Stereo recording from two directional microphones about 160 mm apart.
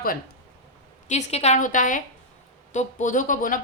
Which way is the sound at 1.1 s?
45° left (ahead or behind).